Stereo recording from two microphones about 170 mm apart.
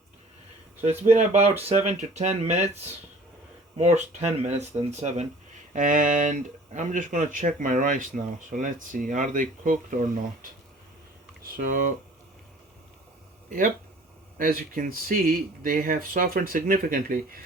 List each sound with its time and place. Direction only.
0.9 s speech: 40° right (ahead or behind)
3.8 s speech: 40° right (ahead or behind)
11.5 s speech: 50° right (ahead or behind)
14.3 s speech: 55° right (ahead or behind)